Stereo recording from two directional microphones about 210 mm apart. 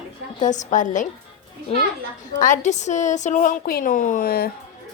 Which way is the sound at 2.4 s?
35° left (ahead or behind).